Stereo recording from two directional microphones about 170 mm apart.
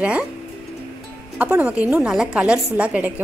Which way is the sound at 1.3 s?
10° right (ahead or behind).